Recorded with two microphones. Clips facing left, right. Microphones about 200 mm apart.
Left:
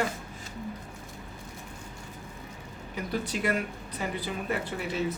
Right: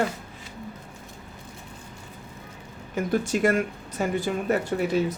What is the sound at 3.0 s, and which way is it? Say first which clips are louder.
Speech: right 8 dB; 45° right (ahead or behind).